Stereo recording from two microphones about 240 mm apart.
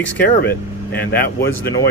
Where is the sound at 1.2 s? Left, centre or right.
Centre.